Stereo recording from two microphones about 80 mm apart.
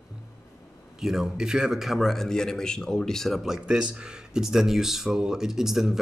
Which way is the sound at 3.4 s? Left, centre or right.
Centre.